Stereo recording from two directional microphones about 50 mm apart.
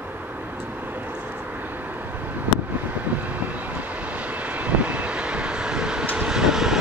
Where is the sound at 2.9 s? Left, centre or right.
Right.